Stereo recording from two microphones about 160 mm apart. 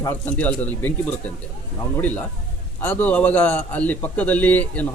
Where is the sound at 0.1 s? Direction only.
10° left (ahead or behind).